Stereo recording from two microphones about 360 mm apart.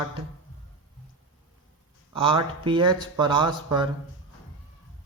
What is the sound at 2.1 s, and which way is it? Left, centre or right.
Speech, centre.